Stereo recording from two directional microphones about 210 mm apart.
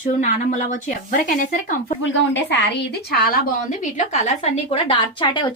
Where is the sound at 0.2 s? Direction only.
35° left (ahead or behind).